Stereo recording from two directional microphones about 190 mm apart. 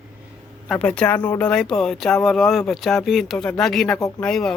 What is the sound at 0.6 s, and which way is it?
Speech, 5° left (ahead or behind).